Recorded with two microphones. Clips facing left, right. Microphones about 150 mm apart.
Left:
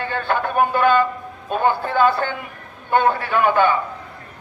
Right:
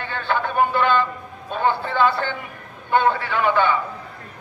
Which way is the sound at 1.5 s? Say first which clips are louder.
Left 2 dB; 45° left (ahead or behind).